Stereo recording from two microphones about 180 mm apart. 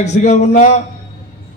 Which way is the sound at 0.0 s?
40° left (ahead or behind).